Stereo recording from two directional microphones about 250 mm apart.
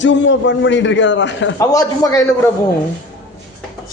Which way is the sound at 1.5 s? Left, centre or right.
Centre.